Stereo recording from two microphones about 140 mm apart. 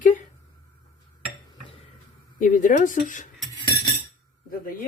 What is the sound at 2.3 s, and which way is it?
Speech, 70° left (ahead or behind).